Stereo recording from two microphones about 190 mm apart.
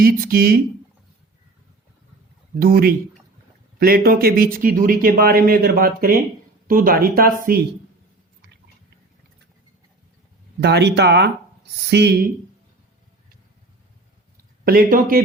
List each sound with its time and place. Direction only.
0.0 s speech: 50° right (ahead or behind)
2.6 s speech: 55° right (ahead or behind)
10.6 s speech: 65° right (ahead or behind)
14.6 s speech: 50° right (ahead or behind)